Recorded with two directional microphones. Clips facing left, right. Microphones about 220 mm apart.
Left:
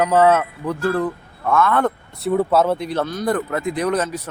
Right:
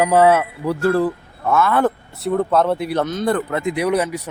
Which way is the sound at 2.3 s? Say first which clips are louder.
Even; 5° left (ahead or behind).